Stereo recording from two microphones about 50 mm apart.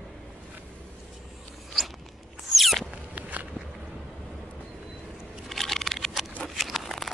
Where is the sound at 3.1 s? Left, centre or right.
Right.